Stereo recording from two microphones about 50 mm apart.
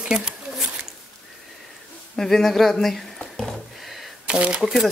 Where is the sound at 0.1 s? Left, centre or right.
Centre.